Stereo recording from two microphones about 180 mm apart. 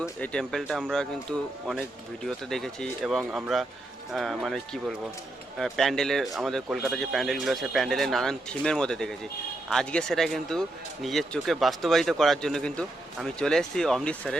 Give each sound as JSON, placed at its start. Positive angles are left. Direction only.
{"t": 0.2, "sound": "speech", "side_deg": 5}
{"t": 2.2, "sound": "speech", "side_deg": 0}